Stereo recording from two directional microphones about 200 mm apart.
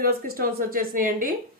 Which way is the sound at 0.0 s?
45° right (ahead or behind).